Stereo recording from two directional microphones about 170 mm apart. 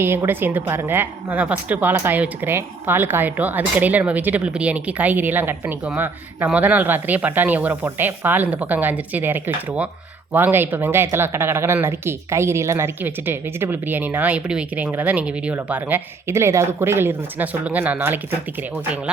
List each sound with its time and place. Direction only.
0.0 s a woman's voice: 15° right (ahead or behind)